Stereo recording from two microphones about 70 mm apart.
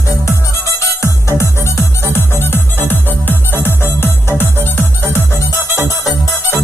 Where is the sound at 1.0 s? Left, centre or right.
Left.